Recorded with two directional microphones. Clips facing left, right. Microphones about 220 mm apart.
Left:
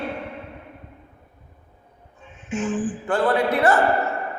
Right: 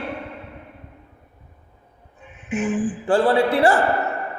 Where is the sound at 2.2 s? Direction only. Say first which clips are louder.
Right 2 dB; 15° right (ahead or behind).